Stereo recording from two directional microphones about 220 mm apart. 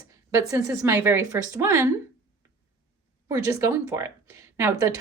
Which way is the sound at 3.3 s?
15° right (ahead or behind).